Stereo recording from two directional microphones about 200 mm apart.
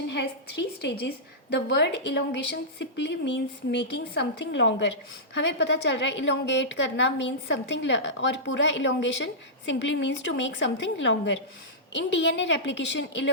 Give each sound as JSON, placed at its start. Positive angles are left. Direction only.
{"t": 0.1, "sound": "a woman's voice", "side_deg": 60}